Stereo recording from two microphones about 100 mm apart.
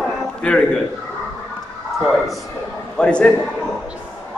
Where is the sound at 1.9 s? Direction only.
Centre (ahead or behind).